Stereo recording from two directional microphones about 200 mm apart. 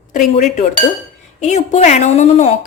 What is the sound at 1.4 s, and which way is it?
A woman's voice, 35° left (ahead or behind).